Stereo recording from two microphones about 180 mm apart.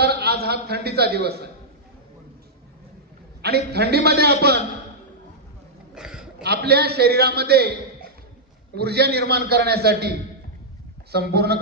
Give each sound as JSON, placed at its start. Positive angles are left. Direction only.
{"t": 0.0, "sound": "a man's voice", "side_deg": -65}
{"t": 3.4, "sound": "a man's voice", "side_deg": -65}
{"t": 5.9, "sound": "a sound", "side_deg": -5}
{"t": 6.4, "sound": "a man's voice", "side_deg": -65}
{"t": 8.7, "sound": "a man's voice", "side_deg": -65}